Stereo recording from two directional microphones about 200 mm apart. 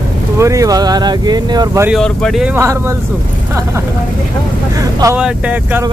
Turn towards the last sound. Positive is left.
turn(degrees=-10)  # may be behind; listen again after turning